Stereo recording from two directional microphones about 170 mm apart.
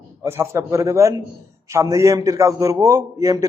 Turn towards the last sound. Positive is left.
turn(degrees=-20)  # may be behind; listen again after turning